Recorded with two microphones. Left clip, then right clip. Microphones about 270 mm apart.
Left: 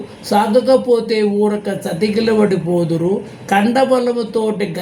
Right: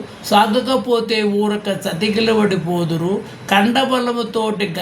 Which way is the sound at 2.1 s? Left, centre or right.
Right.